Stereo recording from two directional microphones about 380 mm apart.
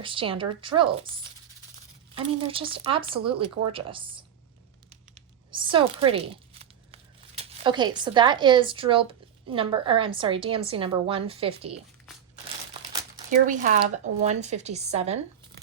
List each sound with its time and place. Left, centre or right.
0.0 s a woman's voice: centre
5.5 s speech: centre
12.9 s speech: centre